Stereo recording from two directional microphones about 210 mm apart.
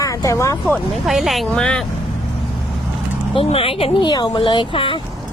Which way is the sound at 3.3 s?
25° left (ahead or behind).